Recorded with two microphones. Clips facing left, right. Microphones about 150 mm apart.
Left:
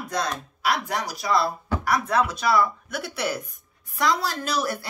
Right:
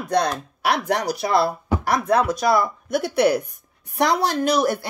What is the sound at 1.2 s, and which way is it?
Speech, 45° right (ahead or behind).